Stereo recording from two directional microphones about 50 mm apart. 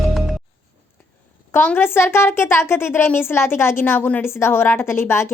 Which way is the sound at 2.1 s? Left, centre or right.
Left.